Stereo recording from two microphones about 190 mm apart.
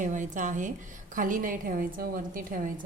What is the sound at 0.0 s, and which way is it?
A woman's voice, 40° right (ahead or behind).